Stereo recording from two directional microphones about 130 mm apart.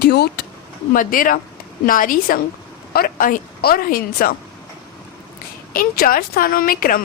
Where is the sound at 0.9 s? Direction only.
90° left.